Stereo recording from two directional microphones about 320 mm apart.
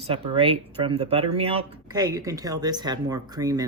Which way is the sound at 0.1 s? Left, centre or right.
Centre.